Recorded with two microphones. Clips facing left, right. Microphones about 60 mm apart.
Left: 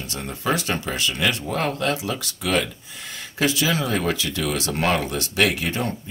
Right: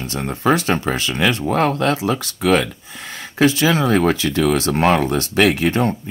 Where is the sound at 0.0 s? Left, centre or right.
Right.